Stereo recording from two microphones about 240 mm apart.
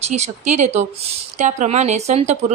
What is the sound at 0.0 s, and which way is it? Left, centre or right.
A woman's voice, right.